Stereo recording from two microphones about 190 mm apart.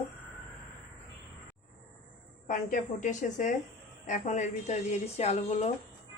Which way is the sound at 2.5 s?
45° left (ahead or behind).